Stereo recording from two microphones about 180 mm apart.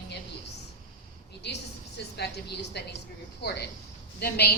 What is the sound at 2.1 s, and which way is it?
Speech, 65° left (ahead or behind).